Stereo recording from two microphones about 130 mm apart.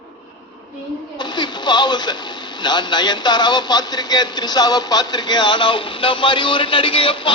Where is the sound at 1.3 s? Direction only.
35° left (ahead or behind).